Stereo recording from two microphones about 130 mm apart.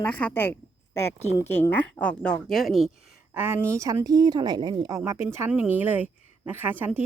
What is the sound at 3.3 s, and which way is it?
A woman's voice, 15° right (ahead or behind).